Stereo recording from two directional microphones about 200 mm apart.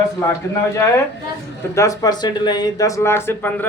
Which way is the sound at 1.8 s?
15° left (ahead or behind).